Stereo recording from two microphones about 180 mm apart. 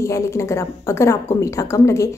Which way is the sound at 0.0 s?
15° left (ahead or behind).